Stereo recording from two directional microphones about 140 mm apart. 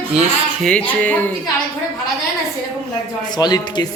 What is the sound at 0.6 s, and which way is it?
Speech, 10° left (ahead or behind).